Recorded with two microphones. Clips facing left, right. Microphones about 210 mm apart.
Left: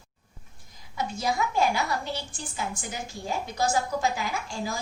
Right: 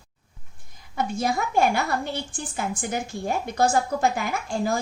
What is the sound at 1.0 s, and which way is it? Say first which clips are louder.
A woman's voice: right 3 dB; 55° right (ahead or behind).